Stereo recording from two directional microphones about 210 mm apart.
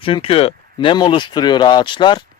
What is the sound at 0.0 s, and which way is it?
Speech, 25° left (ahead or behind).